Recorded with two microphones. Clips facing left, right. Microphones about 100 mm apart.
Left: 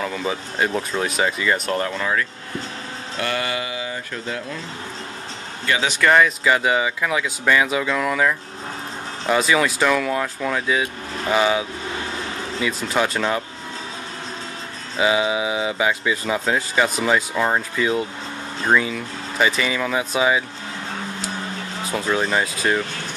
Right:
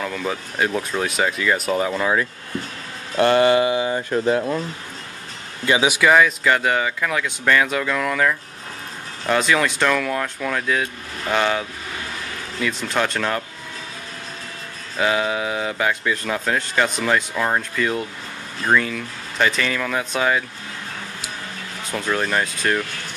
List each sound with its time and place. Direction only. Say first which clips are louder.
0.0 s speech: left 1 dB; centre (ahead or behind); by 2.2 s 15° right (ahead or behind)
3.2 s speech: right 10 dB; 30° right (ahead or behind)
5.7 s speech: right 2 dB; 10° right (ahead or behind); by 11.6 s 5° left (ahead or behind)
12.6 s speech: even; 5° left (ahead or behind)
15.0 s speech: left 1 dB; 5° left (ahead or behind)
21.9 s speech: left 1 dB; 5° left (ahead or behind)